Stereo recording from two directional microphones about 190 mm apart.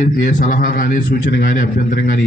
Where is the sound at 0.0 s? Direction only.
45° left (ahead or behind).